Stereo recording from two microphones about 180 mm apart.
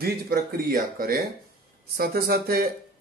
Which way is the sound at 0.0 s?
60° right (ahead or behind).